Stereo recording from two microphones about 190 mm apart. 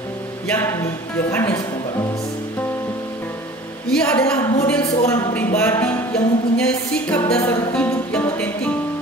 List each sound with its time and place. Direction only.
0.5 s music: 10° left (ahead or behind)
3.9 s a woman's voice: 5° left (ahead or behind)
4.4 s a woman's voice: 20° left (ahead or behind)
5.0 s music: 10° left (ahead or behind)